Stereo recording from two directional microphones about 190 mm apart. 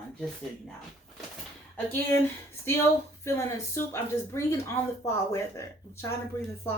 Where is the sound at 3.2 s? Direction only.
15° left (ahead or behind).